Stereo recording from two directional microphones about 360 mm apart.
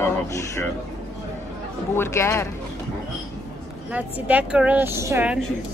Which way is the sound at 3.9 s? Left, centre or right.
Centre.